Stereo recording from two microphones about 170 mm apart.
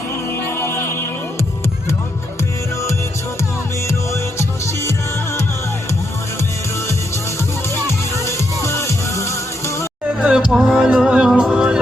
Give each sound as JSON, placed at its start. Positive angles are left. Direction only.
{"t": 0.5, "sound": "music", "side_deg": 15}
{"t": 3.8, "sound": "music", "side_deg": 15}
{"t": 8.2, "sound": "music", "side_deg": 15}
{"t": 10.2, "sound": "music", "side_deg": -5}